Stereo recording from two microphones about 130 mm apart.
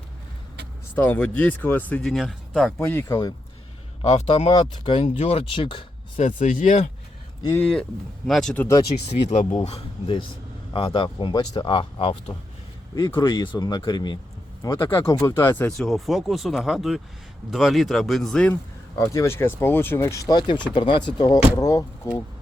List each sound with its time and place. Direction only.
0.9 s speech: 10° left (ahead or behind)
2.8 s speech: 20° left (ahead or behind)
4.0 s speech: 60° left (ahead or behind)
4.4 s speech: 35° left (ahead or behind)
4.9 s speech: 50° left (ahead or behind)
6.1 s speech: 70° left (ahead or behind)
7.5 s speech: 10° left (ahead or behind)
8.5 s speech: 25° left (ahead or behind)
9.0 s speech: 60° left (ahead or behind)
10.7 s speech: 40° left (ahead or behind)
14.6 s speech: 25° left (ahead or behind)
15.8 s speech: centre (ahead or behind)
18.9 s speech: 20° left (ahead or behind)